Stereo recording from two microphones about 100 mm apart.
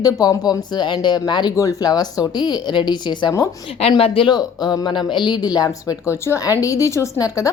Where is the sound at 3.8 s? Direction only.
85° left.